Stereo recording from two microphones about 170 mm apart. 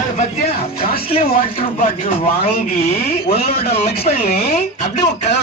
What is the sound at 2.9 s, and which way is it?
Speech, 35° left (ahead or behind).